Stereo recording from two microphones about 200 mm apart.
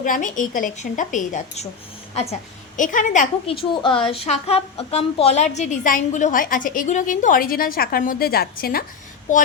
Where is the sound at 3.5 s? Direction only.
25° left (ahead or behind).